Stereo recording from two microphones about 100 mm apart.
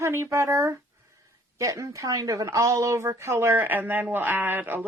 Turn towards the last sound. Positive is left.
turn(degrees=-20)  # may be behind; listen again after turning